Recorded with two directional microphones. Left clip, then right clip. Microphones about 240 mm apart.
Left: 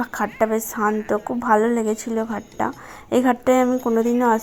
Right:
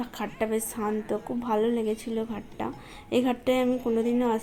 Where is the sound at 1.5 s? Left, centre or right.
Left.